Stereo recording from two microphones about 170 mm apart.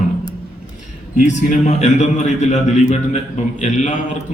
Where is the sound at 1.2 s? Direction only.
45° left (ahead or behind).